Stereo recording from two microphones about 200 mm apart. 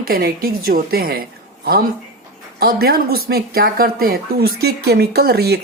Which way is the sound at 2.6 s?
50° right (ahead or behind).